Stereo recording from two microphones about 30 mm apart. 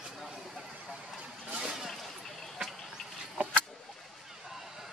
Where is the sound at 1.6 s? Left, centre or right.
Right.